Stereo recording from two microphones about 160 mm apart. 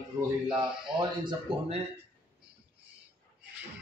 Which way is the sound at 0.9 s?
30° right (ahead or behind).